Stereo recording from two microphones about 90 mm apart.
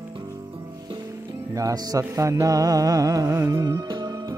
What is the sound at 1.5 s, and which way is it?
Music, 40° right (ahead or behind).